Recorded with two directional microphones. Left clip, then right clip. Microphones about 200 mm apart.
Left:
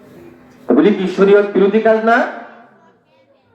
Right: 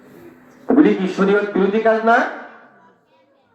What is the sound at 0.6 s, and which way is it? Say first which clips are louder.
Speech: left 2 dB; 40° left (ahead or behind).